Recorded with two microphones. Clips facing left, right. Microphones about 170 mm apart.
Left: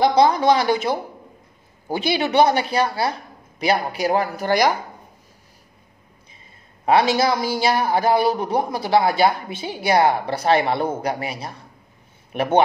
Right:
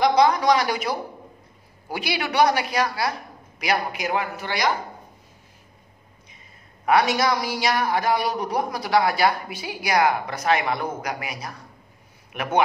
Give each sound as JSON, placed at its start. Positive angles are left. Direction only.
{"t": 0.0, "sound": "a man's voice", "side_deg": 30}
{"t": 6.9, "sound": "a man's voice", "side_deg": 25}